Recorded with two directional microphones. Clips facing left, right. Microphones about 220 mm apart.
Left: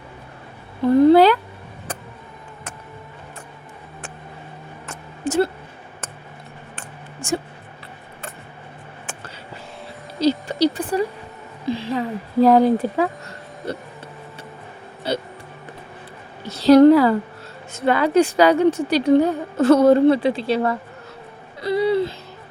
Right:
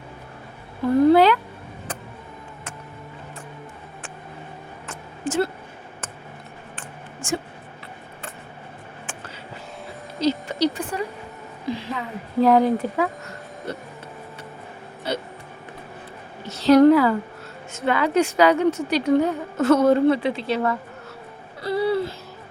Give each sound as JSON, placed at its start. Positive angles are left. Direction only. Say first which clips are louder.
{"t": 1.1, "sound": "a sound", "louder": "left 3 dB", "side_deg": 35}
{"t": 5.2, "sound": "speech", "louder": "left 4 dB", "side_deg": 40}
{"t": 10.2, "sound": "a sound", "louder": "left 3 dB", "side_deg": 35}
{"t": 11.7, "sound": "speech", "louder": "left 6 dB", "side_deg": 30}
{"t": 15.1, "sound": "vehicle", "louder": "left 3 dB", "side_deg": 30}
{"t": 16.5, "sound": "a woman's voice", "louder": "left 3 dB", "side_deg": 35}
{"t": 21.6, "sound": "music", "louder": "left 3 dB", "side_deg": 15}